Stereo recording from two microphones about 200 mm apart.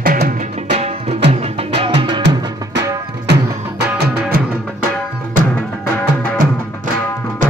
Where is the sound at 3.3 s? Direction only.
55° right (ahead or behind).